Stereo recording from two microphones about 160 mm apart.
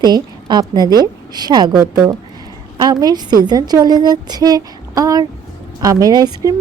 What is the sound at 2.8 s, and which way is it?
A woman's voice, 25° right (ahead or behind).